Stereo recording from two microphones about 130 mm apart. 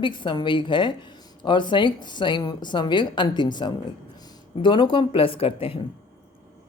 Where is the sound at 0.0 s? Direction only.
35° left (ahead or behind).